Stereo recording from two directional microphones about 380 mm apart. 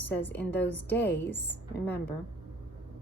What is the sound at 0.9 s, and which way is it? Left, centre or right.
Speech, left.